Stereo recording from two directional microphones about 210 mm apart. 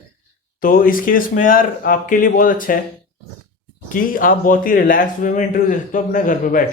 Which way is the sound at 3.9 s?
40° left (ahead or behind).